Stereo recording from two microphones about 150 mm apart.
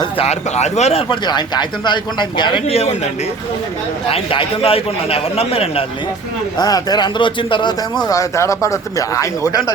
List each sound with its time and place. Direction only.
0.0 s speech: 45° left (ahead or behind)
2.7 s speech: 45° left (ahead or behind)
4.1 s speech: 40° left (ahead or behind)
6.6 s speech: 25° left (ahead or behind)
8.0 s speech: 20° left (ahead or behind)